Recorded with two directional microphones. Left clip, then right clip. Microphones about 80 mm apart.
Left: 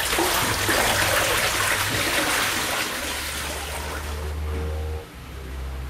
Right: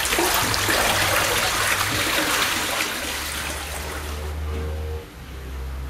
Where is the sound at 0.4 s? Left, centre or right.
Centre.